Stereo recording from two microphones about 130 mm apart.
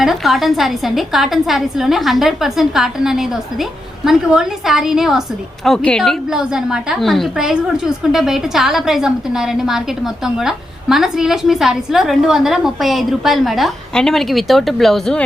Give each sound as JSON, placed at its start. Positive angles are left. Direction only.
{"t": 0.0, "sound": "a woman's voice", "side_deg": 0}